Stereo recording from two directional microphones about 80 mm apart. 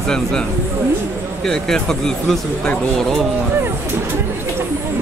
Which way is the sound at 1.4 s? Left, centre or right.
Centre.